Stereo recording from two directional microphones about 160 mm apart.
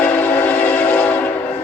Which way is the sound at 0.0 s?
10° left (ahead or behind).